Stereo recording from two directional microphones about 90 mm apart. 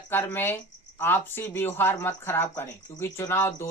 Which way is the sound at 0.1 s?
20° left (ahead or behind).